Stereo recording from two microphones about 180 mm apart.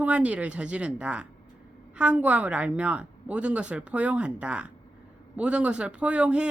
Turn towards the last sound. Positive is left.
turn(degrees=-5)  # may be behind; listen again after turning